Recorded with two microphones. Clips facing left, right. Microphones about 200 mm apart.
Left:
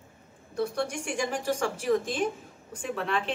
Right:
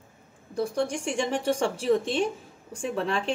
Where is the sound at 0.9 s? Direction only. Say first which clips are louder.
Right 3 dB; 25° right (ahead or behind).